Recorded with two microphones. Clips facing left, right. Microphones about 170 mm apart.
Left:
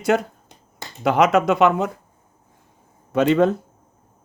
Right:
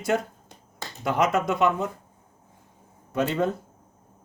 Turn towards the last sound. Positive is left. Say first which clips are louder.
# left 8 dB
turn(degrees=85)